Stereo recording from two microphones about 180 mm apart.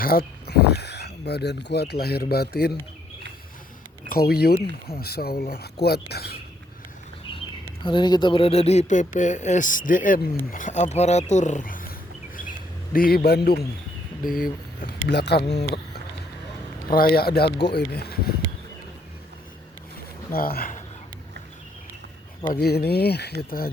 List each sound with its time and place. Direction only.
0.0 s speech: 55° left (ahead or behind)
4.1 s speech: 60° left (ahead or behind)
7.9 s speech: 25° left (ahead or behind); by 11.9 s 50° left (ahead or behind)
12.4 s bird: 50° left (ahead or behind)
14.3 s speech: 50° left (ahead or behind); by 15.4 s 65° left (ahead or behind)
16.9 s speech: 55° left (ahead or behind)
20.3 s speech: 55° left (ahead or behind)
22.5 s speech: 60° left (ahead or behind)